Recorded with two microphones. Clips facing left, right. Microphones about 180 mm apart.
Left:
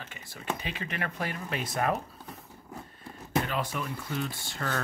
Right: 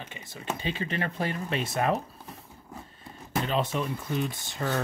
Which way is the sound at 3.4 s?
25° right (ahead or behind).